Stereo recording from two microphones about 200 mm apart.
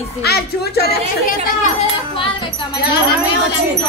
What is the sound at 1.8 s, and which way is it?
Speech, 25° left (ahead or behind).